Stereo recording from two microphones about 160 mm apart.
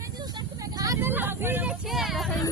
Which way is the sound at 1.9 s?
Centre (ahead or behind).